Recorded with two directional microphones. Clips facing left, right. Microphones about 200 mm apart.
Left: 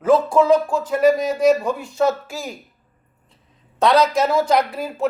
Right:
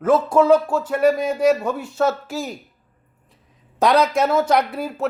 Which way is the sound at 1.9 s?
15° left (ahead or behind).